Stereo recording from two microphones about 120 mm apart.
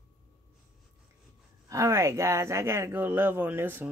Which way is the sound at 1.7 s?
25° right (ahead or behind).